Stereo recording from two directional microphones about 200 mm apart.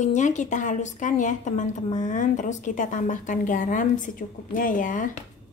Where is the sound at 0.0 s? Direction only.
35° left (ahead or behind).